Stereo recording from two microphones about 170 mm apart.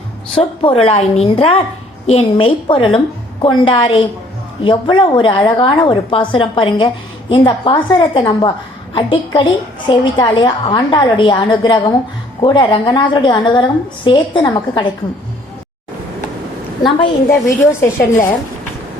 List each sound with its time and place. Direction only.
0.6 s a woman's voice: 35° left (ahead or behind)
17.2 s a woman's voice: 15° left (ahead or behind)